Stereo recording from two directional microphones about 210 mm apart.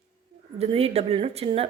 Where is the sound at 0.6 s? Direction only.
30° right (ahead or behind).